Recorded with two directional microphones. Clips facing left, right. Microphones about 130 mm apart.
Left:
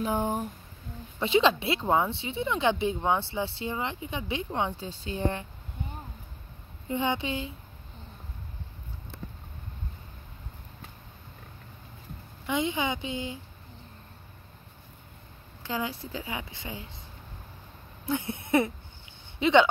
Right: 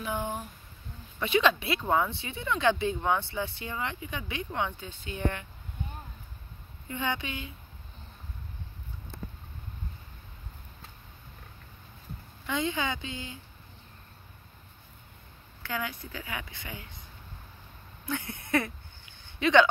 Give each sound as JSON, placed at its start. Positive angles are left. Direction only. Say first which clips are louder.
{"t": 0.0, "sound": "speech", "louder": "left 5 dB", "side_deg": 35}
{"t": 1.2, "sound": "speech", "louder": "left 2 dB", "side_deg": 25}
{"t": 6.9, "sound": "speech", "louder": "left 5 dB", "side_deg": 25}
{"t": 12.4, "sound": "speech", "louder": "left 2 dB", "side_deg": 20}
{"t": 15.6, "sound": "speech", "louder": "left 3 dB", "side_deg": 25}
{"t": 18.0, "sound": "a sound", "louder": "left 5 dB", "side_deg": 25}
{"t": 19.4, "sound": "speech", "louder": "left 1 dB", "side_deg": 20}